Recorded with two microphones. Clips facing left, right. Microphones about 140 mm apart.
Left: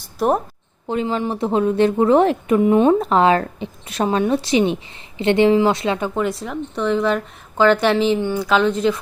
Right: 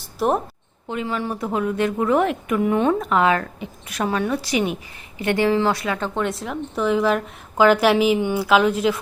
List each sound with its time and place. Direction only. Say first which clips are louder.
0.0 s a sound: left 2 dB; centre (ahead or behind)
0.9 s a woman's voice: left 4 dB; 30° left (ahead or behind)
6.0 s a woman's voice: left 3 dB; centre (ahead or behind)